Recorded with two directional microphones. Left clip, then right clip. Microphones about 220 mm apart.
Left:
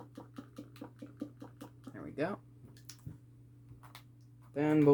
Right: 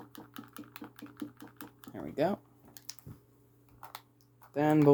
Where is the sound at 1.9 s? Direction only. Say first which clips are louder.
Right 6 dB; 30° right (ahead or behind).